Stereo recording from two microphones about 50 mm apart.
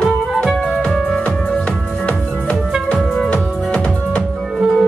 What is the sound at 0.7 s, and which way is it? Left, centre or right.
Music, centre.